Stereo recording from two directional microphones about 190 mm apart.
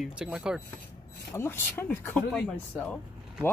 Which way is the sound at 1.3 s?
10° left (ahead or behind).